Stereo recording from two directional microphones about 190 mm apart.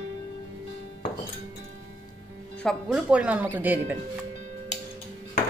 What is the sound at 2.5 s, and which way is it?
Speech, 5° left (ahead or behind).